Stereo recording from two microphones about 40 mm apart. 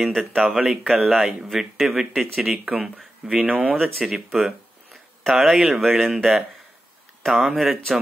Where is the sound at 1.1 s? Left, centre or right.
Right.